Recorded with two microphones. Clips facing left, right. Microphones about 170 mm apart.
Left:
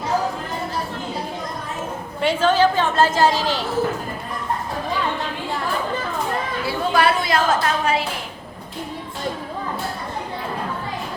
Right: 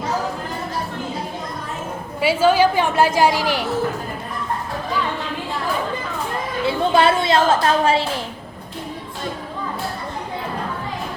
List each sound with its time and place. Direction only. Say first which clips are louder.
2.2 s a woman's voice: right 2 dB; 10° right (ahead or behind)
6.7 s a woman's voice: right 3 dB; 25° right (ahead or behind)